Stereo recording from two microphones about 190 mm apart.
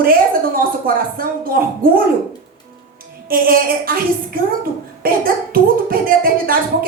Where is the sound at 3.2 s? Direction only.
50° right (ahead or behind).